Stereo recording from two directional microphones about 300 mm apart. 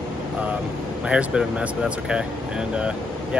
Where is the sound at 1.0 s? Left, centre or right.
Centre.